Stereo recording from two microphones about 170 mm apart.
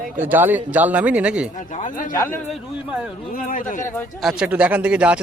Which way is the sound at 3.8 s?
15° left (ahead or behind).